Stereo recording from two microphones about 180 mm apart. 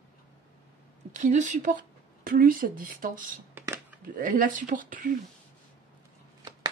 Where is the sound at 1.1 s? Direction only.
45° right (ahead or behind).